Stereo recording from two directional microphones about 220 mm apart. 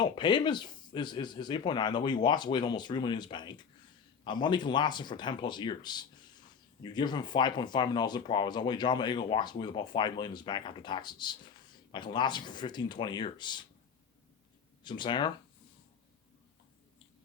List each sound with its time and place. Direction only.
0.0 s speech: 20° left (ahead or behind)
14.8 s speech: 20° left (ahead or behind)